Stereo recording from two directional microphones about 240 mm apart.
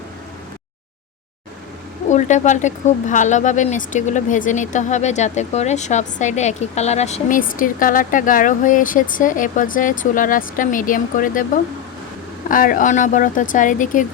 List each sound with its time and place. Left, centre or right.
2.0 s speech: left